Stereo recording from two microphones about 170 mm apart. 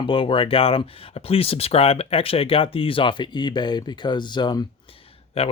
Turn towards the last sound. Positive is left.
turn(degrees=35)  # may be behind; listen again after turning